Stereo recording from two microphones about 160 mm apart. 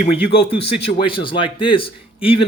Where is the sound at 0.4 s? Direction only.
35° left (ahead or behind).